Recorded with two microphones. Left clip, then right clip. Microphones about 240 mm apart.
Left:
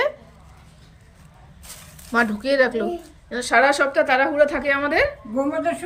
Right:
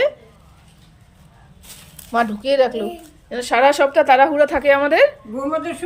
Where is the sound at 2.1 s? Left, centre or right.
Centre.